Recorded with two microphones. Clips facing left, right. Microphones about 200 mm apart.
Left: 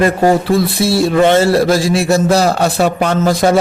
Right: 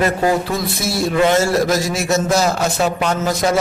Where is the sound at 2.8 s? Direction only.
60° left (ahead or behind).